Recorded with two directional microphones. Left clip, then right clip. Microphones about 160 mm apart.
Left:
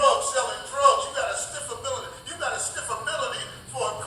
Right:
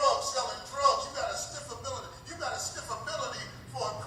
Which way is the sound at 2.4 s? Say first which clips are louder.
Left 6 dB; 30° left (ahead or behind).